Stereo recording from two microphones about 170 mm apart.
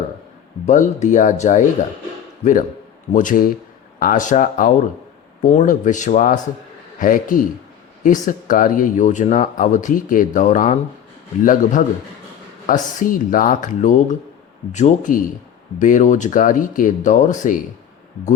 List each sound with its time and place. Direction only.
0.6 s a woman's voice: 45° left (ahead or behind)